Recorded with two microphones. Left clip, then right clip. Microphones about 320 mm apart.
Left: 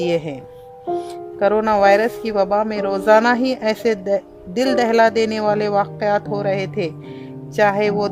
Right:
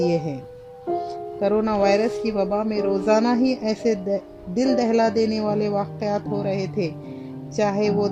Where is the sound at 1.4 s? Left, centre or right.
Left.